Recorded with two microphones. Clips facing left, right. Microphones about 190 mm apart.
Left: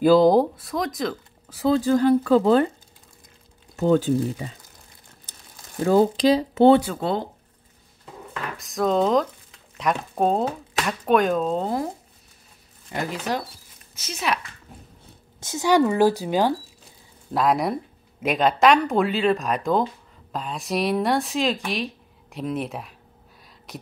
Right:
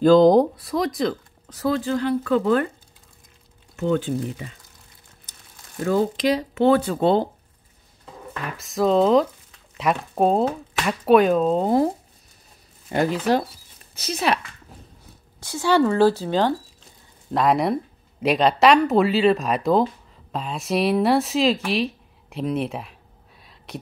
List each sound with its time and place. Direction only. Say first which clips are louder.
0.0 s speech: right 2 dB; 5° left (ahead or behind)
1.7 s speech: left 4 dB; 40° left (ahead or behind)
3.7 s speech: left 3 dB; 35° left (ahead or behind)
5.9 s speech: left 3 dB; 30° left (ahead or behind)
7.0 s speech: right 7 dB; 25° right (ahead or behind)
8.5 s speech: right 3 dB; centre (ahead or behind)
12.9 s speech: right 7 dB; 30° right (ahead or behind)
15.4 s speech: even; 15° left (ahead or behind)
17.3 s speech: right 2 dB; centre (ahead or behind)